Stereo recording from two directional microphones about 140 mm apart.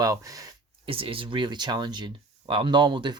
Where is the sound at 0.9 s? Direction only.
40° right (ahead or behind).